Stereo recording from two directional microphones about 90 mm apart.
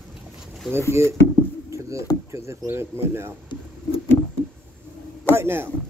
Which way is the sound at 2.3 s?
30° right (ahead or behind).